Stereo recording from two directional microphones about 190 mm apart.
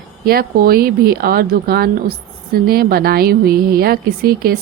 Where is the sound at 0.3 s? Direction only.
50° right (ahead or behind).